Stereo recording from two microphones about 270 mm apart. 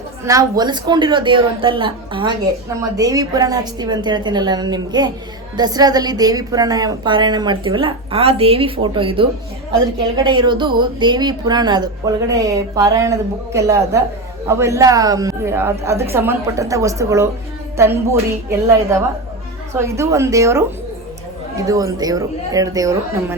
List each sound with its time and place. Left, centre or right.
0.3 s speech: centre
10.2 s speech: centre